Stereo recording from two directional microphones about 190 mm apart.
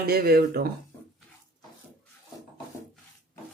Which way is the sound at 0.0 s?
55° right (ahead or behind).